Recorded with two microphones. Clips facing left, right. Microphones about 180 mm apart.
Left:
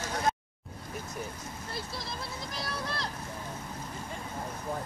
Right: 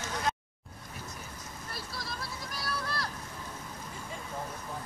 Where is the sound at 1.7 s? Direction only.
25° left (ahead or behind).